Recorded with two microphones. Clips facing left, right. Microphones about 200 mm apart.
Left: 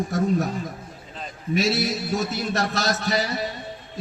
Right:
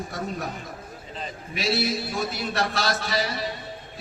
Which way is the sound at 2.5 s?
45° left (ahead or behind).